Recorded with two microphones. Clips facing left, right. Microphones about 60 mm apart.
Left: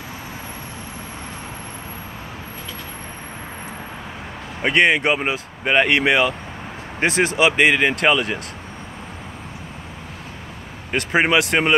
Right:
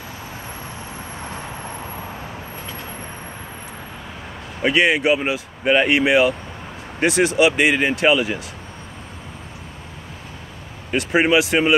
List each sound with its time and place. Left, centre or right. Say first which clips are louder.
4.6 s speech: even; left
7.7 s speech: even; left
11.1 s speech: right 1 dB; left